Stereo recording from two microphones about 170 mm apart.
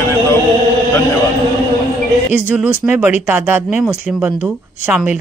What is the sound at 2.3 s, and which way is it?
Speech, 5° right (ahead or behind).